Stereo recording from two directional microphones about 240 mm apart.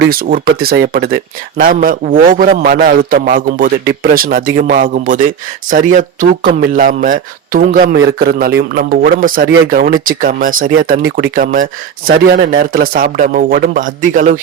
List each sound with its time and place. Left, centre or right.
0.1 s speech: right